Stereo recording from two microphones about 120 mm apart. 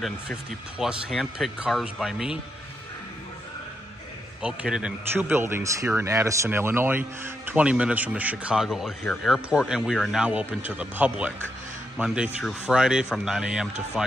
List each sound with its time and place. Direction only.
0.7 s speech: 5° right (ahead or behind)
4.4 s speech: 10° right (ahead or behind)
5.1 s speech: 20° right (ahead or behind)
12.4 s speech: 5° right (ahead or behind)